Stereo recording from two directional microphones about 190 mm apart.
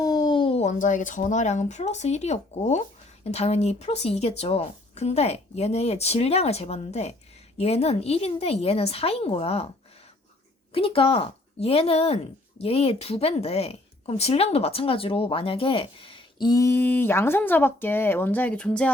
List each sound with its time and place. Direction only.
0.0 s a woman's voice: 20° left (ahead or behind)
10.8 s speech: 30° left (ahead or behind); by 18.9 s 5° left (ahead or behind)